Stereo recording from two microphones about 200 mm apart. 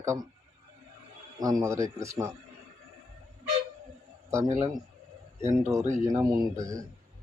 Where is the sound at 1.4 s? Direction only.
15° right (ahead or behind).